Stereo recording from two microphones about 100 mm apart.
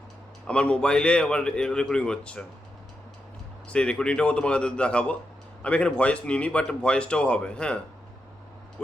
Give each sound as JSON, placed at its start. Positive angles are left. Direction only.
{"t": 0.4, "sound": "speech", "side_deg": 10}
{"t": 3.7, "sound": "speech", "side_deg": 10}